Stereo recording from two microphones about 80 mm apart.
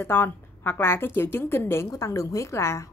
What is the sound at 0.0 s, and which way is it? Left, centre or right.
A woman's voice, left.